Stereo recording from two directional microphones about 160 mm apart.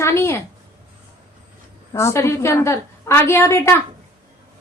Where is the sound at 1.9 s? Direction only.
15° left (ahead or behind).